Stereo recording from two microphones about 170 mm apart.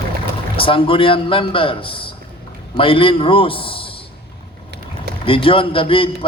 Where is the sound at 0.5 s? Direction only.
30° left (ahead or behind).